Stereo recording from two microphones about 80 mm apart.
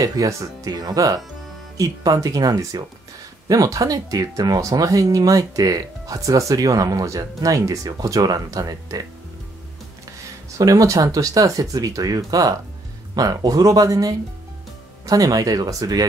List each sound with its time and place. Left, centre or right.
0.0 s speech: right
10.6 s speech: right